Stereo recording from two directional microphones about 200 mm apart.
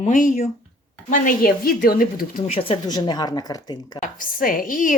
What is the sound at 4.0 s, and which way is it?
Speech, 45° left (ahead or behind).